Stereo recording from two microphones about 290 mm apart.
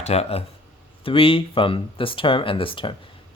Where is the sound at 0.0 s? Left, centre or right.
Left.